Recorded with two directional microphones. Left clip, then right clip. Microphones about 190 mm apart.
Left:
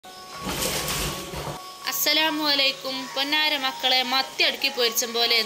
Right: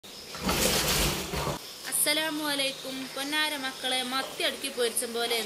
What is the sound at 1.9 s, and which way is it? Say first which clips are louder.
A woman's voice: left 7 dB; 20° left (ahead or behind).